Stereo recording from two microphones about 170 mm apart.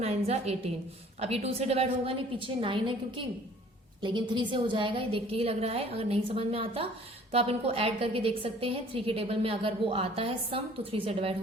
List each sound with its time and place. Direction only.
0.0 s a woman's voice: 40° right (ahead or behind)